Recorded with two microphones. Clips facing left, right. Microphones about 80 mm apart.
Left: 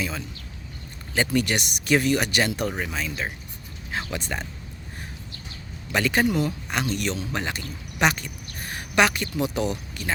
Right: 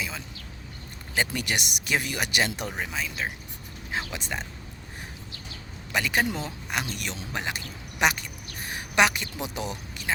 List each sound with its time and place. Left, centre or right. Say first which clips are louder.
1.1 s speech: left 5 dB; centre
3.9 s a sound: left 2 dB; centre
5.9 s speech: left 3 dB; centre
6.2 s speech: left 8 dB; right
6.7 s speech: left 5 dB; centre